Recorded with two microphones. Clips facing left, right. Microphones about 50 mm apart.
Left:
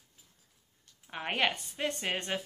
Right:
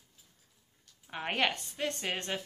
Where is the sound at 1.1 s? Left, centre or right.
Centre.